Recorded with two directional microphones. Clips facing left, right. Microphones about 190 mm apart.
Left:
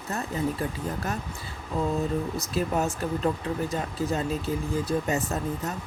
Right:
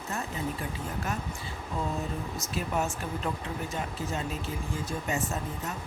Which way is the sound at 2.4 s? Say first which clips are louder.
Left 1 dB; 35° left (ahead or behind).